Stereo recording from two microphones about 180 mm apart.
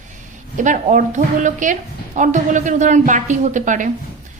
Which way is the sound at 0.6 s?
45° right (ahead or behind).